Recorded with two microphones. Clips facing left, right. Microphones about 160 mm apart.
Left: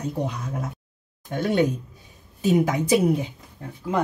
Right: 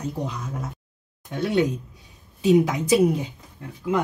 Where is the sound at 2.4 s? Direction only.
50° left (ahead or behind).